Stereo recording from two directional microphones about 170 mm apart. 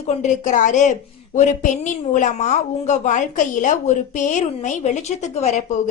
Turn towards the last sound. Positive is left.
turn(degrees=40)  # may be behind; listen again after turning